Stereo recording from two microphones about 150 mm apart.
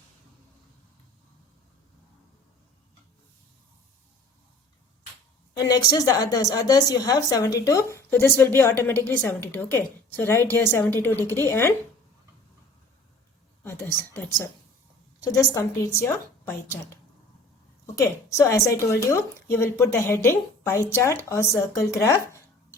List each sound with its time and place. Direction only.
5.5 s a woman's voice: 25° left (ahead or behind)
13.7 s a woman's voice: 15° left (ahead or behind)
17.9 s a woman's voice: 20° left (ahead or behind)